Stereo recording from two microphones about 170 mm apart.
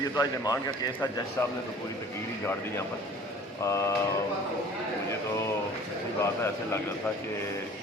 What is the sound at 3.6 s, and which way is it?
Speech, 15° left (ahead or behind).